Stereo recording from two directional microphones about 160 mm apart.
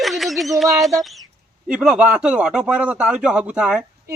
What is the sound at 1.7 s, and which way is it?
Speech, 5° right (ahead or behind).